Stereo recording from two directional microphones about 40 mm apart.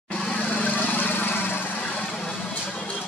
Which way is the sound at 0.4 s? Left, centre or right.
Left.